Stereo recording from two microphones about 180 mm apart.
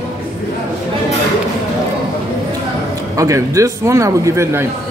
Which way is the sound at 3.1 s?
15° right (ahead or behind).